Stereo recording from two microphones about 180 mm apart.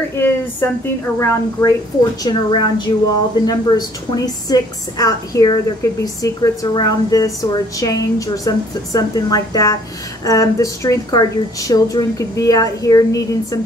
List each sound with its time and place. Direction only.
0.2 s a woman's voice: 10° left (ahead or behind)
2.2 s a woman's voice: 25° left (ahead or behind)